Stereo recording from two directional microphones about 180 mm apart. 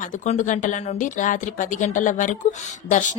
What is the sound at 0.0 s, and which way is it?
A woman's voice, 45° left (ahead or behind).